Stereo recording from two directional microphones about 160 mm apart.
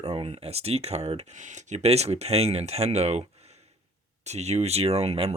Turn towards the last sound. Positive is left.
turn(degrees=-40)  # may be behind; listen again after turning